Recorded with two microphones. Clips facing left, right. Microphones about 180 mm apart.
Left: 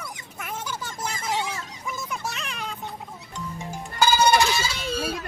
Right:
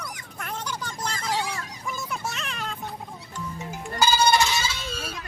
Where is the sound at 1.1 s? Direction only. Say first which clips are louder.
Even; 20° left (ahead or behind).